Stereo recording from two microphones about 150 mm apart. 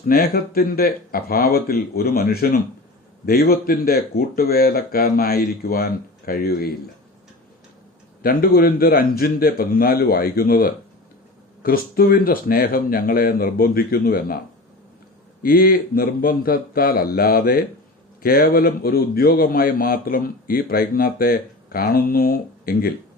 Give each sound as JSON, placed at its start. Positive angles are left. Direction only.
{"t": 0.1, "sound": "a man's voice", "side_deg": 90}
{"t": 8.2, "sound": "a man's voice", "side_deg": 80}
{"t": 11.6, "sound": "speech", "side_deg": 85}
{"t": 15.4, "sound": "a man's voice", "side_deg": 75}